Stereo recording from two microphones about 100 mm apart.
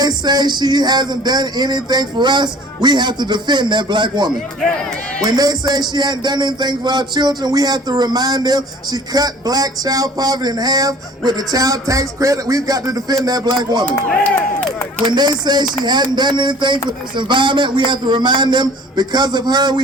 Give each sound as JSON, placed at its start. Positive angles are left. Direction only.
{"t": 0.0, "sound": "a man's voice", "side_deg": -45}
{"t": 15.0, "sound": "speech", "side_deg": -45}